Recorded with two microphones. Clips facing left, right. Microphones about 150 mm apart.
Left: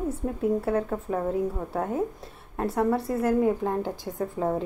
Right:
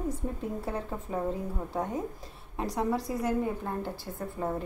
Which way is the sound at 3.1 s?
55° left (ahead or behind).